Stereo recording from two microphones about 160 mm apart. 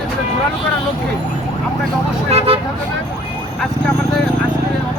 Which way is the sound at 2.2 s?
40° right (ahead or behind).